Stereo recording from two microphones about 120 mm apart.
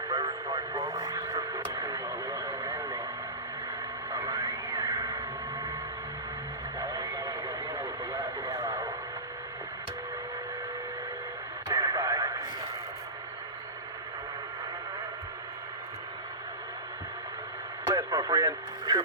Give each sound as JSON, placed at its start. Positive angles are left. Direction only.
{"t": 0.1, "sound": "radio", "side_deg": -35}
{"t": 4.1, "sound": "radio", "side_deg": -30}
{"t": 6.7, "sound": "radio", "side_deg": -30}
{"t": 11.7, "sound": "radio", "side_deg": -30}
{"t": 17.9, "sound": "radio", "side_deg": -30}